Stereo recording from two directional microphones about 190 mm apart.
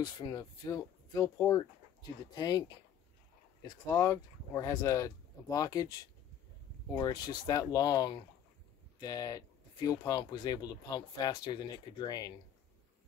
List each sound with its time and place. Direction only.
0.0 s speech: 20° left (ahead or behind)
3.6 s speech: 15° left (ahead or behind)
7.0 s speech: 20° left (ahead or behind)